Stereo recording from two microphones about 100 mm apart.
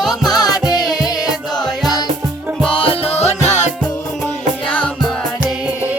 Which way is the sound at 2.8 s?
70° left (ahead or behind).